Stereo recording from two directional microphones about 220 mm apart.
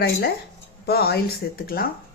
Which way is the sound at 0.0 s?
45° left (ahead or behind).